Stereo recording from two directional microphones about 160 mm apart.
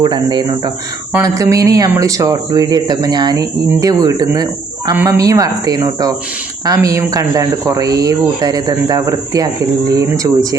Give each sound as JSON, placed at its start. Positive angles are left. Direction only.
{"t": 0.0, "sound": "speech", "side_deg": -25}